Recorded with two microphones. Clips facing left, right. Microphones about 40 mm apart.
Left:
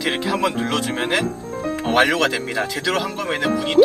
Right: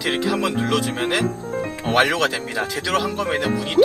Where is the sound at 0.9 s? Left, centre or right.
Centre.